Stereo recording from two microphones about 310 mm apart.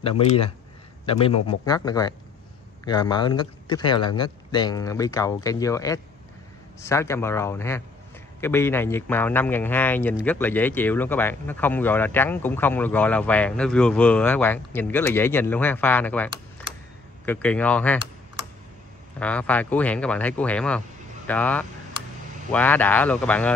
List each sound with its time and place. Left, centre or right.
1.0 s a man's voice: centre
17.3 s speech: centre
19.1 s speech: centre